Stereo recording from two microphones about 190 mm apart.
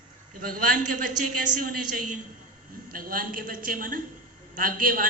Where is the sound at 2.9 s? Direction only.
50° right (ahead or behind).